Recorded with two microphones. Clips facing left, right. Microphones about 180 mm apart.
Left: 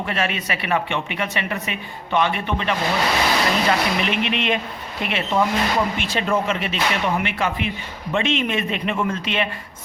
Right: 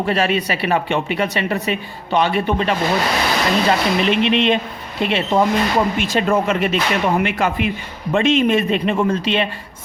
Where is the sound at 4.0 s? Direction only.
30° right (ahead or behind).